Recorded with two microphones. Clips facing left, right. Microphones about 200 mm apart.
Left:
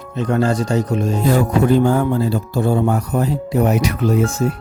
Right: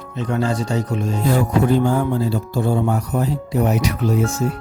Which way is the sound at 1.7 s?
60° left (ahead or behind).